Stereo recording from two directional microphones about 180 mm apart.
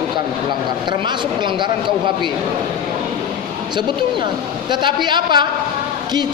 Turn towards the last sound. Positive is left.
turn(degrees=-25)  # may be behind; listen again after turning